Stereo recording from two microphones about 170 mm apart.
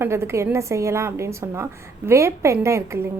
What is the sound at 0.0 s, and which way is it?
A woman's voice, 15° right (ahead or behind).